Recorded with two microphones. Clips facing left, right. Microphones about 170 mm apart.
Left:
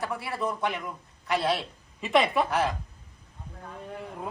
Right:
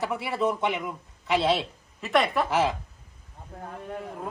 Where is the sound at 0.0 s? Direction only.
20° right (ahead or behind).